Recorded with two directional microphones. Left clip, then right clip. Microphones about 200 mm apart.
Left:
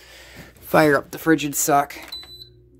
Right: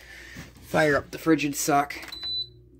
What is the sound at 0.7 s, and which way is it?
Speech, 25° left (ahead or behind).